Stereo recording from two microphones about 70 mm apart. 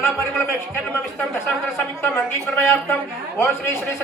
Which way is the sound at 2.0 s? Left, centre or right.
Left.